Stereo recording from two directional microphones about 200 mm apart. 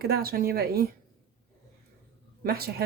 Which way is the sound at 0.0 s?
50° right (ahead or behind).